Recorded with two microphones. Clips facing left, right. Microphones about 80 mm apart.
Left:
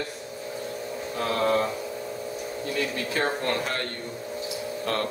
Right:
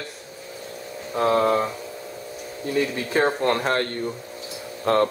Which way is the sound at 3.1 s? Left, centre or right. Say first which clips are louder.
Right 7 dB; right.